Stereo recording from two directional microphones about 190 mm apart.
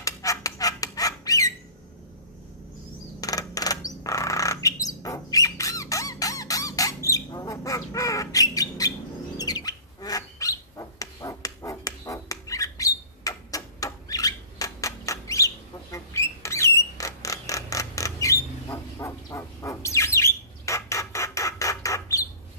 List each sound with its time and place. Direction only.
0.0 s fowl: 15° left (ahead or behind)
3.2 s bird: 20° left (ahead or behind)